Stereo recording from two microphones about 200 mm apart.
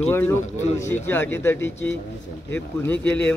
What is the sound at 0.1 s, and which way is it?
A man's voice, 10° left (ahead or behind).